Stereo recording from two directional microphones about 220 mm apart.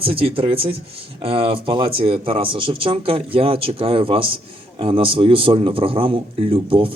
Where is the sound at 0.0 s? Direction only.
25° right (ahead or behind).